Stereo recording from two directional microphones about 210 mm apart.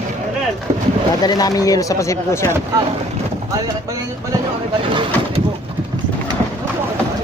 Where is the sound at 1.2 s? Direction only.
20° left (ahead or behind).